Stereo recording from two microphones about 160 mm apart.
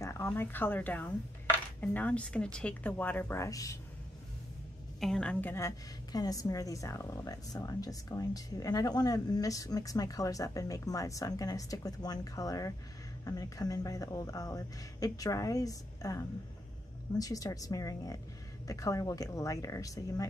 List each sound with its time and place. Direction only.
0.0 s speech: 15° left (ahead or behind)
5.0 s a woman's voice: 5° left (ahead or behind); by 20.2 s 20° left (ahead or behind)